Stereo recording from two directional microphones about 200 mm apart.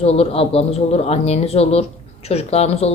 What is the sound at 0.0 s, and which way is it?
Speech, 30° left (ahead or behind).